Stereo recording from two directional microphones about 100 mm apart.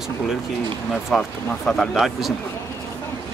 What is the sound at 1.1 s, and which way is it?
Speech, 5° left (ahead or behind).